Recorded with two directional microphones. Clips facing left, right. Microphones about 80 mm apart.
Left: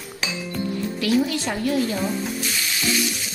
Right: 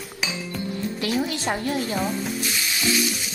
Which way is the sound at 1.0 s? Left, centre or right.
Right.